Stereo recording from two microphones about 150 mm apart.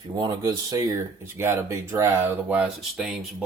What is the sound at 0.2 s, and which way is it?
Speech, 25° right (ahead or behind).